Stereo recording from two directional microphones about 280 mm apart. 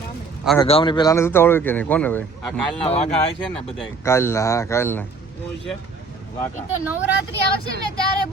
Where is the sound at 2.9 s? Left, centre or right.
Left.